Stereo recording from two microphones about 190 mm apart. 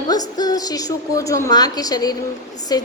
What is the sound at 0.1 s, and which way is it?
A woman's voice, 20° left (ahead or behind).